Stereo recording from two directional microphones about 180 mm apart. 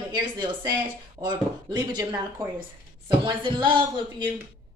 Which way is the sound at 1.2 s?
25° right (ahead or behind).